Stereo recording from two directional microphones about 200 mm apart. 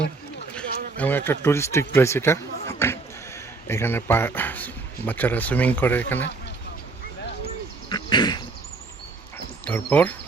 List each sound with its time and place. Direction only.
0.5 s speech: 10° left (ahead or behind)
7.9 s a sound: 20° left (ahead or behind)
9.6 s speech: 10° left (ahead or behind)